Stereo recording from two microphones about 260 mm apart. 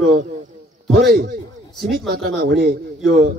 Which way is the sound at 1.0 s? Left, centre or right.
Right.